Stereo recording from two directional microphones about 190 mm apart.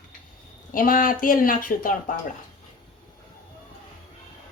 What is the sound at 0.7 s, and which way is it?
Speech, 45° left (ahead or behind).